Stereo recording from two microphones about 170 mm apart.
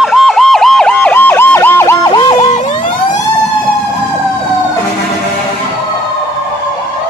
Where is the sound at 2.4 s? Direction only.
45° left (ahead or behind).